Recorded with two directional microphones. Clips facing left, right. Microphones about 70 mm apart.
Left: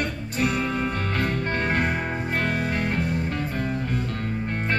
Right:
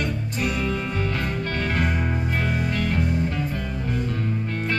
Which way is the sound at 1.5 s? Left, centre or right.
Centre.